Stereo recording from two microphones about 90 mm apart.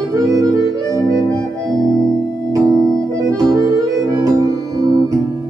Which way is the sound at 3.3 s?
40° right (ahead or behind).